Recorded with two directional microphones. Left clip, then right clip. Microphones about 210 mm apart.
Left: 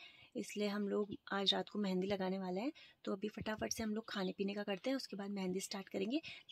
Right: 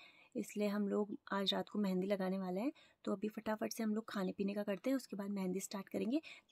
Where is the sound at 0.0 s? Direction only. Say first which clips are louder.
Right 1 dB; 15° right (ahead or behind).